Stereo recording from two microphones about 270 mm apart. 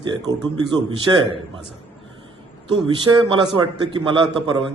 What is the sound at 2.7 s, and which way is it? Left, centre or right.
A man's voice, centre.